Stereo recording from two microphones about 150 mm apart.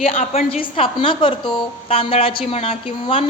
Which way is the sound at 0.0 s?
40° left (ahead or behind).